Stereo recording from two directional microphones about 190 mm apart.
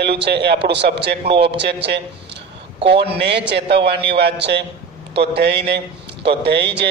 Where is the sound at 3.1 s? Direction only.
65° right (ahead or behind).